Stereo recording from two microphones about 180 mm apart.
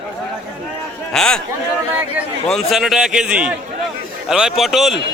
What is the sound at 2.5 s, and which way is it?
A man's voice, centre (ahead or behind).